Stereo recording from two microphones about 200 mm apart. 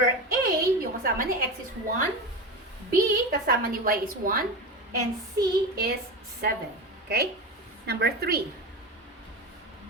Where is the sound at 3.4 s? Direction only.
45° right (ahead or behind).